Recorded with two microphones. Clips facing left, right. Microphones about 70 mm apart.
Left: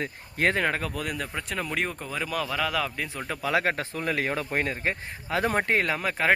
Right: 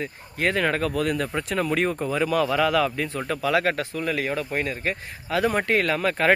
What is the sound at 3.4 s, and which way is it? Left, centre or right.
Speech, left.